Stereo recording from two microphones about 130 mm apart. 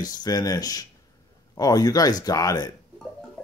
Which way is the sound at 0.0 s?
30° left (ahead or behind).